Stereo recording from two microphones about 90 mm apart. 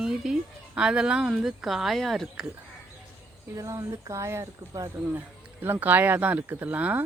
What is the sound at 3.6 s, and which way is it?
Speech, 35° right (ahead or behind).